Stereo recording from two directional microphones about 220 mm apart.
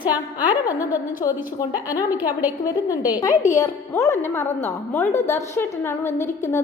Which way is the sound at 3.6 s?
15° left (ahead or behind).